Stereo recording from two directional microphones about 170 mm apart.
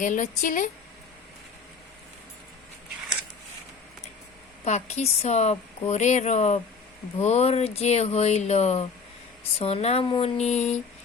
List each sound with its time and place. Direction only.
0.0 s speech: 50° left (ahead or behind)
4.6 s speech: 40° left (ahead or behind)